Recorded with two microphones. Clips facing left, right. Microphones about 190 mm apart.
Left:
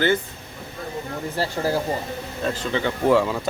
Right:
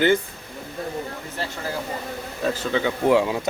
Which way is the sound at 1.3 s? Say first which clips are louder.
Left 7 dB; 35° left (ahead or behind).